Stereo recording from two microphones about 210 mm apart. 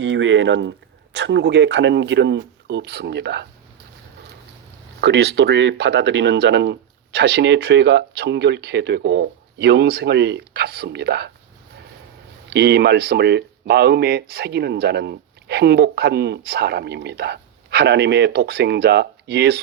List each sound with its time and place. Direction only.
0.0 s speech: 60° right (ahead or behind)
4.9 s speech: 50° right (ahead or behind)
12.5 s speech: 50° right (ahead or behind)